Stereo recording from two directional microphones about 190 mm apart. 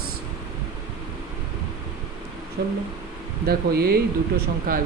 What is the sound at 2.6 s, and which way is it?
Speech, 55° right (ahead or behind).